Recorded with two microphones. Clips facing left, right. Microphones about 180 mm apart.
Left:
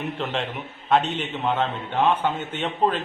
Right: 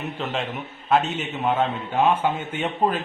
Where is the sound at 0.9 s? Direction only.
5° right (ahead or behind).